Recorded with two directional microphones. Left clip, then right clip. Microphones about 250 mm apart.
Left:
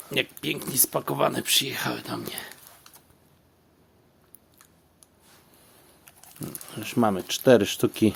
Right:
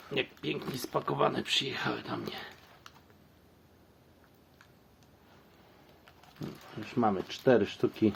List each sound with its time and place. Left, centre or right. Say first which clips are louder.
0.1 s speech: left 6 dB; left
6.7 s speech: left 5 dB; left